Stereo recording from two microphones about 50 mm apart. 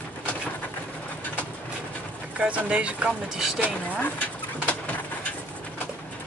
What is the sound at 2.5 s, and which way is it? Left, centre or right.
Speech, right.